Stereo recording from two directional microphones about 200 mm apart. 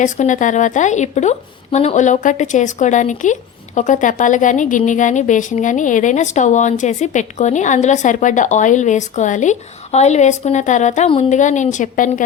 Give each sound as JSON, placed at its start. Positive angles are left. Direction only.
{"t": 0.0, "sound": "a woman's voice", "side_deg": 40}